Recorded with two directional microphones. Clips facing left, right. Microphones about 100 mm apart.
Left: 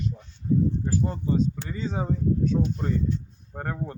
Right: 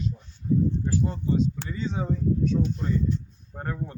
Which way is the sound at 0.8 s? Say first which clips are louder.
Even; 40° left (ahead or behind).